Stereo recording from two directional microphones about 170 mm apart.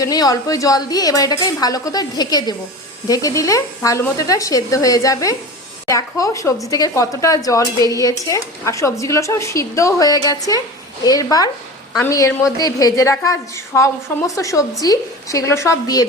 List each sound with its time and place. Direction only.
0.0 s a woman's voice: 20° left (ahead or behind)